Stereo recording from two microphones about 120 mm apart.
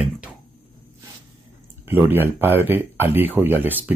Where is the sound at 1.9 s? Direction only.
15° right (ahead or behind).